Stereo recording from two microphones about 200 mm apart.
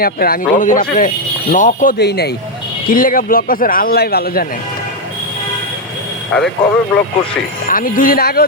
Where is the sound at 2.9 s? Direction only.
45° left (ahead or behind).